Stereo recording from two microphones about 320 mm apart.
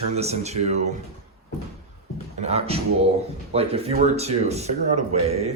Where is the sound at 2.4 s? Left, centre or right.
Centre.